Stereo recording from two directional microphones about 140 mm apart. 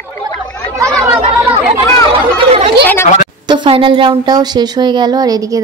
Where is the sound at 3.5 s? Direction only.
35° right (ahead or behind).